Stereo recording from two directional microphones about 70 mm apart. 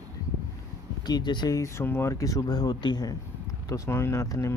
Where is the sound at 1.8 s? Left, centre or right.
Left.